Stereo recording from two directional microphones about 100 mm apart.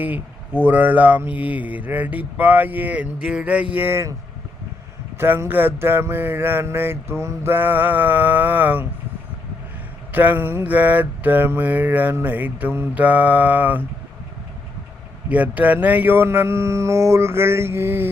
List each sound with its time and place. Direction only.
0.6 s mantra: 15° right (ahead or behind)
5.1 s speech: 20° right (ahead or behind)
10.1 s mantra: 15° right (ahead or behind)
15.3 s speech: 15° right (ahead or behind)